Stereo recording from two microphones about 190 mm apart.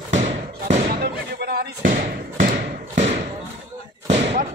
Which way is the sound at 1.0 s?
55° right (ahead or behind).